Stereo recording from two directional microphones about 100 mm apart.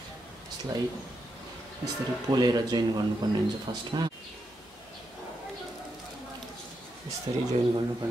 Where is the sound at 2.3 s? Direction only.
40° right (ahead or behind).